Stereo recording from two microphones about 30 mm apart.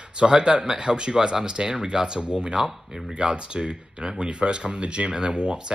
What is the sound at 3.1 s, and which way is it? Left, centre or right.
Speech, right.